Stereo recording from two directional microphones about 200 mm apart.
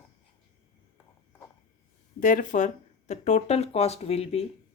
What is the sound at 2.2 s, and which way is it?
Speech, 45° left (ahead or behind).